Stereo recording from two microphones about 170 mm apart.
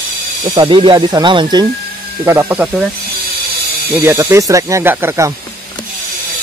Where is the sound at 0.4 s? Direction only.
30° right (ahead or behind).